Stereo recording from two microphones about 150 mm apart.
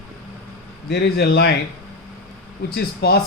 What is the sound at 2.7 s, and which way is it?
Speech, 90° left.